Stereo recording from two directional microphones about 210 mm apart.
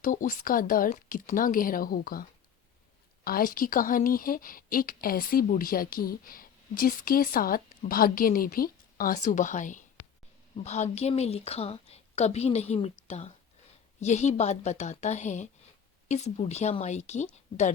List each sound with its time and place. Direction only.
0.0 s a woman's voice: 40° left (ahead or behind)
3.2 s a woman's voice: 45° left (ahead or behind)